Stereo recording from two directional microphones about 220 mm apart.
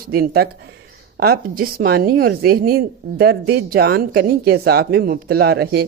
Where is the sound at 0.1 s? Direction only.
45° right (ahead or behind).